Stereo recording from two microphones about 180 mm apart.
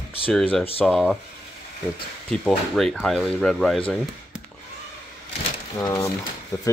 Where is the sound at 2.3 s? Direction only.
Centre (ahead or behind).